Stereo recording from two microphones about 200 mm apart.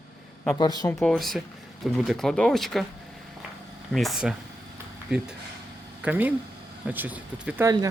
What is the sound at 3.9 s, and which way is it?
Speech, centre (ahead or behind).